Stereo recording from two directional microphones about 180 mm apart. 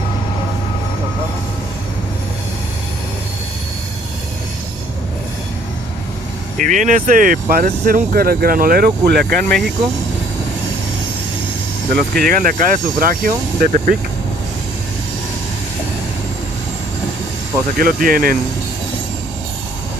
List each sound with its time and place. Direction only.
6.6 s speech: 45° right (ahead or behind)
11.9 s speech: 55° right (ahead or behind)
17.7 s speech: 50° right (ahead or behind)